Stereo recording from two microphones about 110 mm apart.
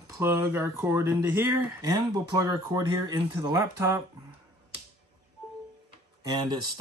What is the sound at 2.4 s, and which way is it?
Speech, 35° right (ahead or behind).